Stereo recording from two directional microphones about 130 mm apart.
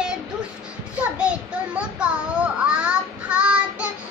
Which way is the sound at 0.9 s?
10° right (ahead or behind).